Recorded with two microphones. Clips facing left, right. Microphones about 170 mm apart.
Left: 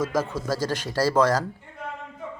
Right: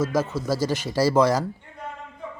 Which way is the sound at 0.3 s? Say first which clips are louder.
Right 2 dB; 10° right (ahead or behind).